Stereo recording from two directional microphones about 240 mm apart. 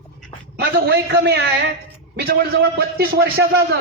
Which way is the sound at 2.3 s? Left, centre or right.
Right.